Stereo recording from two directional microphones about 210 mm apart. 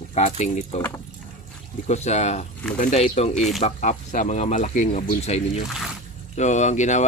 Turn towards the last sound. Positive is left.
turn(degrees=35)  # may be behind; listen again after turning